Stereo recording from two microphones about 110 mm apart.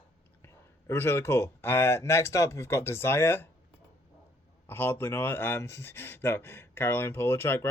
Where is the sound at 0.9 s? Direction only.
20° left (ahead or behind).